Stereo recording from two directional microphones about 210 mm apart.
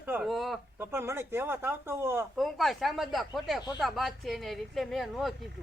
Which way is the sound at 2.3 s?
Centre (ahead or behind).